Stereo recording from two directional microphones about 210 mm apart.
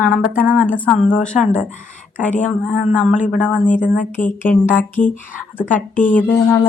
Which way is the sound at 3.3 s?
5° left (ahead or behind).